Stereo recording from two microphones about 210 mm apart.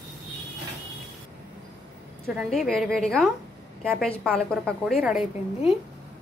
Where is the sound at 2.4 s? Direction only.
Centre (ahead or behind).